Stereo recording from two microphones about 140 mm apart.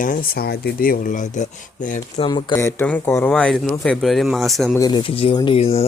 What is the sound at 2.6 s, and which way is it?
Speech, 15° left (ahead or behind).